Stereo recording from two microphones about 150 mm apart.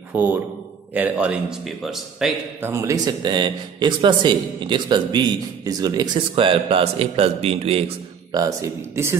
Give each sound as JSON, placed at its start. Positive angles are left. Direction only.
{"t": 0.1, "sound": "a man's voice", "side_deg": -10}
{"t": 2.6, "sound": "a man's voice", "side_deg": -15}
{"t": 8.3, "sound": "speech", "side_deg": -25}